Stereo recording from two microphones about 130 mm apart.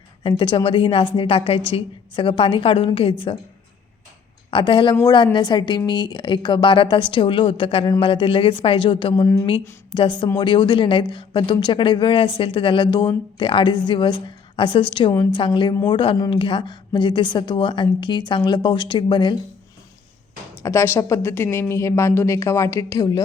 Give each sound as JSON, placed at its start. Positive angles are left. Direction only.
{"t": 0.2, "sound": "a woman's voice", "side_deg": 40}
{"t": 4.5, "sound": "a woman's voice", "side_deg": 40}
{"t": 9.2, "sound": "a woman's voice", "side_deg": 20}
{"t": 9.9, "sound": "a woman's voice", "side_deg": 40}
{"t": 20.6, "sound": "a woman's voice", "side_deg": 20}